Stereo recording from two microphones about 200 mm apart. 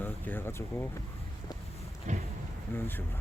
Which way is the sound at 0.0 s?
10° left (ahead or behind).